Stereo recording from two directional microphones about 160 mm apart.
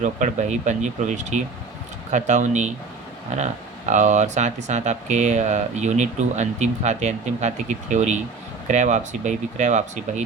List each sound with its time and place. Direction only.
0.0 s speech: 50° right (ahead or behind)